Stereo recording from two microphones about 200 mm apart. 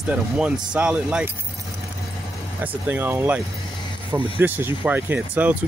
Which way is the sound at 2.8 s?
10° right (ahead or behind).